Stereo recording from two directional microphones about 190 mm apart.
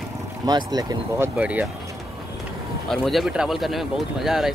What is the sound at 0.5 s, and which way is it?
Speech, 20° right (ahead or behind).